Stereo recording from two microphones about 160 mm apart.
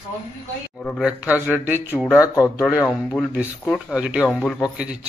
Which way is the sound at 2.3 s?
20° left (ahead or behind).